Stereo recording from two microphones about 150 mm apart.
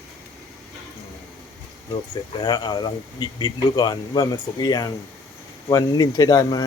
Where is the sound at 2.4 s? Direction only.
30° left (ahead or behind).